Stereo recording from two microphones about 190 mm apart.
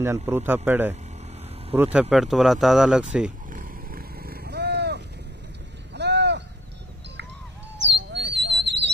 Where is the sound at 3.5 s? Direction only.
45° right (ahead or behind); by 6.4 s 65° right (ahead or behind).